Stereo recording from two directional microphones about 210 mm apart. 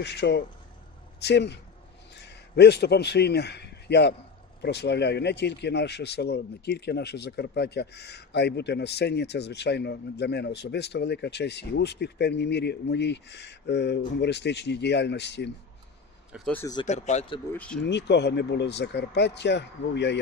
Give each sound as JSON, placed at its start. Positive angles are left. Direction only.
{"t": 0.0, "sound": "a man's voice", "side_deg": 55}
{"t": 16.3, "sound": "speech", "side_deg": 0}
{"t": 16.5, "sound": "speech", "side_deg": 15}
{"t": 16.8, "sound": "speech", "side_deg": 35}
{"t": 17.5, "sound": "speech", "side_deg": 5}
{"t": 17.8, "sound": "speech", "side_deg": 55}